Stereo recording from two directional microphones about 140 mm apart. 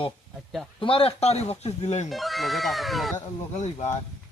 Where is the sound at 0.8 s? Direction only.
40° left (ahead or behind).